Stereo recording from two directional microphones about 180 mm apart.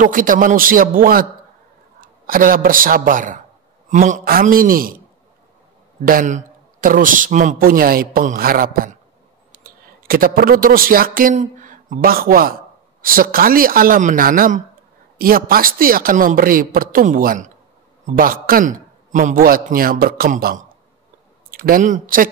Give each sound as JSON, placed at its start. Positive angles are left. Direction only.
{"t": 0.0, "sound": "a man's voice", "side_deg": -50}
{"t": 6.0, "sound": "a man's voice", "side_deg": -45}